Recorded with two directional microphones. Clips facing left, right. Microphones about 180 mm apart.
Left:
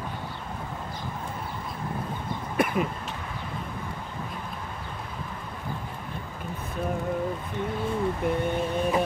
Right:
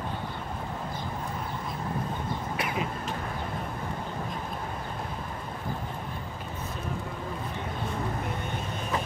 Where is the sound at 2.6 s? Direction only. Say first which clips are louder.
Left 8 dB; 50° left (ahead or behind).